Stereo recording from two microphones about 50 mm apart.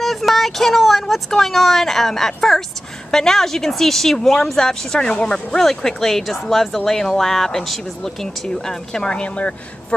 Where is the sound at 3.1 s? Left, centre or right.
Centre.